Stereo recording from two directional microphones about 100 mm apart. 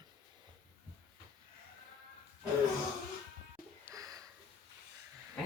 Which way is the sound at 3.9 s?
35° right (ahead or behind).